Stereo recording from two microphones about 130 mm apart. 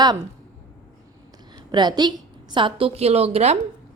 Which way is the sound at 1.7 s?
35° right (ahead or behind).